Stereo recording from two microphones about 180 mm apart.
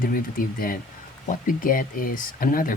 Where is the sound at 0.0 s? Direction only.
50° left (ahead or behind).